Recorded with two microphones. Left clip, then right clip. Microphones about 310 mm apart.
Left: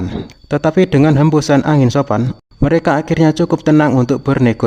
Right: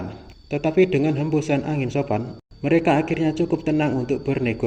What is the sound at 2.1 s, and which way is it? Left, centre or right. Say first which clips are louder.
Speech: left 8 dB; left.